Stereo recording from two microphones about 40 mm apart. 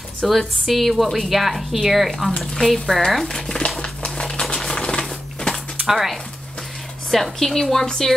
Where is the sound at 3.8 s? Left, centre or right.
Left.